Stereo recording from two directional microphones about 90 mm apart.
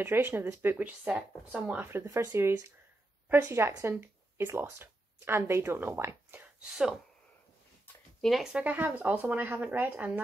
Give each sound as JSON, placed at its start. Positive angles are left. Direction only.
{"t": 0.0, "sound": "speech", "side_deg": -25}
{"t": 1.9, "sound": "speech", "side_deg": -30}
{"t": 8.2, "sound": "speech", "side_deg": 0}
{"t": 8.6, "sound": "speech", "side_deg": -20}